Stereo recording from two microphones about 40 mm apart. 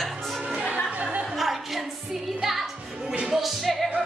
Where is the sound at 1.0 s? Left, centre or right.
Right.